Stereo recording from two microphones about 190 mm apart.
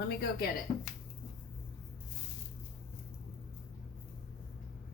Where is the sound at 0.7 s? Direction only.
30° left (ahead or behind).